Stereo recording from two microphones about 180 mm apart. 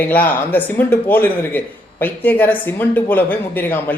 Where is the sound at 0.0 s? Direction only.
10° left (ahead or behind).